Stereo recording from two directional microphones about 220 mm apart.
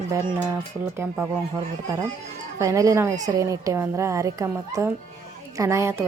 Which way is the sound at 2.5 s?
15° right (ahead or behind).